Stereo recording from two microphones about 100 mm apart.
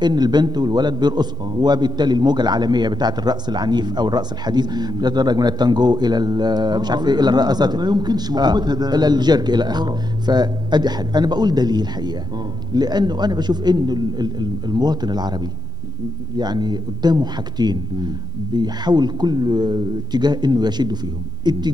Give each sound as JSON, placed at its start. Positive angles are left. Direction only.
{"t": 0.0, "sound": "a man's voice", "side_deg": -45}